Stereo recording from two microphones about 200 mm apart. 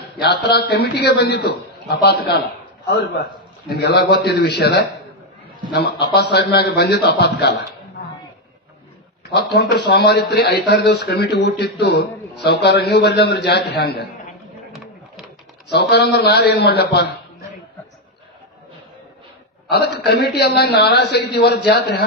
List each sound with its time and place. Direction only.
0.3 s speech: 55° left (ahead or behind)
3.7 s speech: 55° left (ahead or behind)
9.2 s speech: 55° left (ahead or behind)
15.7 s speech: 55° left (ahead or behind)
20.0 s speech: 55° left (ahead or behind)